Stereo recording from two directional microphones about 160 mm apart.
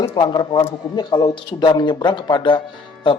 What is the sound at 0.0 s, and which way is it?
A man's voice, 30° left (ahead or behind).